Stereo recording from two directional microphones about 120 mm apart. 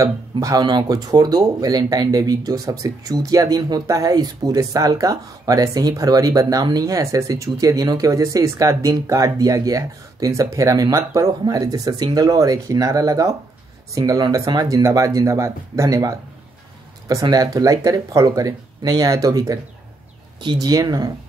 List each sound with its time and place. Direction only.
0.0 s speech: 30° right (ahead or behind)
20.6 s speech: 30° right (ahead or behind)